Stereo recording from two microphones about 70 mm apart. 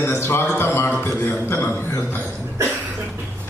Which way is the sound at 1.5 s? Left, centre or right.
Left.